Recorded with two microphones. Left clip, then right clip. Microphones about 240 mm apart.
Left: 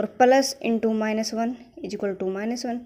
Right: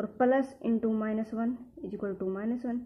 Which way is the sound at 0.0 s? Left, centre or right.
Left.